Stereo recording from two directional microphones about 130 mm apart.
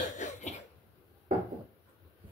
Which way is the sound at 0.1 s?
65° left (ahead or behind).